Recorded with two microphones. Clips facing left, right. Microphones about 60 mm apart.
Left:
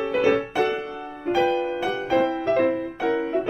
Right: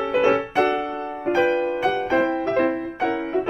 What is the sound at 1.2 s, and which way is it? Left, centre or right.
Music, right.